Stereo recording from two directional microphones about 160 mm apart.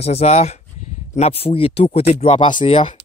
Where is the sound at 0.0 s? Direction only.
40° left (ahead or behind).